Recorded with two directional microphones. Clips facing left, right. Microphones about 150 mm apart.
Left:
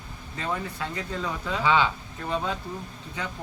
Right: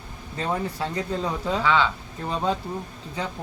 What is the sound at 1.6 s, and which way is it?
Speech, 15° left (ahead or behind).